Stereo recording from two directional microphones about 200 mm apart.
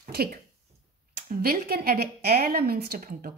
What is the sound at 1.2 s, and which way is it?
Speech, 50° right (ahead or behind).